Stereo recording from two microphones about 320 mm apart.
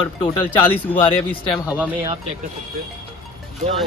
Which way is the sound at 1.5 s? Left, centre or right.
Centre.